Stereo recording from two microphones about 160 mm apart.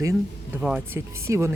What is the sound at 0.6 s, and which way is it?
Speech, 5° right (ahead or behind).